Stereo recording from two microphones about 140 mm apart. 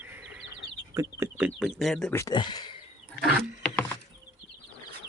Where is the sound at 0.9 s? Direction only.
15° right (ahead or behind).